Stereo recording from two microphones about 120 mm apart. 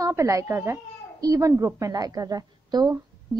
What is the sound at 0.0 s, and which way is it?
A child's voice, 25° right (ahead or behind).